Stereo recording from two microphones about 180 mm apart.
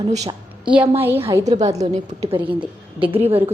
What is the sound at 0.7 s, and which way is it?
Speech, 10° right (ahead or behind).